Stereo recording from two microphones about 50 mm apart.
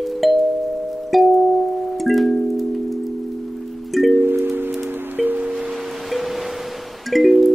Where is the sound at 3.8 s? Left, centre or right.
Centre.